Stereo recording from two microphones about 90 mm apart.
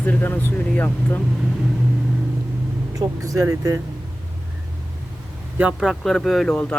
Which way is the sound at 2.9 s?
40° right (ahead or behind).